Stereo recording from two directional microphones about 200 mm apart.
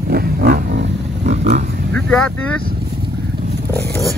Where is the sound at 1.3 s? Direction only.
35° right (ahead or behind).